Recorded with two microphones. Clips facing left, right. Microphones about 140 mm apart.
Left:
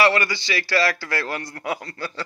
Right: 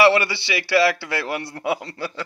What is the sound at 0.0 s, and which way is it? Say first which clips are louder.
A man's voice: right 3 dB; 25° right (ahead or behind).